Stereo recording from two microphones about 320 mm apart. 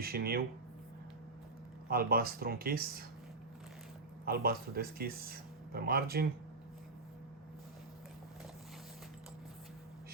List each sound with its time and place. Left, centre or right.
0.0 s speech: right
1.9 s speech: right
4.3 s speech: right